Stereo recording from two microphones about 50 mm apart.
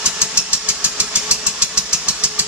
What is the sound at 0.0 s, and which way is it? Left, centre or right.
Engine, right.